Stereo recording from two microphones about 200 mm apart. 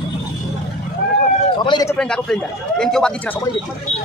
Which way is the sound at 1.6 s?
20° left (ahead or behind).